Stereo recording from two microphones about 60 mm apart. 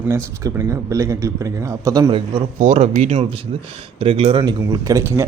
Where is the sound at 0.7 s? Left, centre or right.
Right.